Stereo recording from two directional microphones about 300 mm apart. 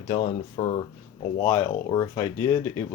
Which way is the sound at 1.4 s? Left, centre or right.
Centre.